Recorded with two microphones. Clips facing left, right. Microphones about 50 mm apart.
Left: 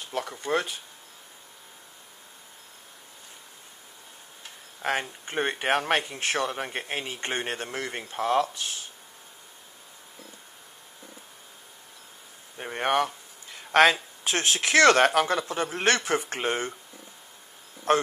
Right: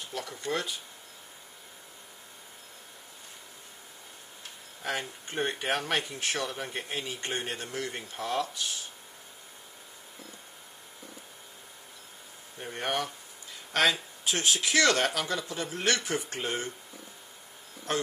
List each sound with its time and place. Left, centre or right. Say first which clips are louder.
0.1 s a man's voice: left 5 dB; left
4.8 s a man's voice: left 5 dB; left
12.5 s a sound: left 7 dB; left
14.2 s speech: left 3 dB; left
17.9 s speech: left 8 dB; left